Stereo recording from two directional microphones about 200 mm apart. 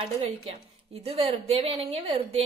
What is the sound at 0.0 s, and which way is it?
A woman's voice, 30° right (ahead or behind).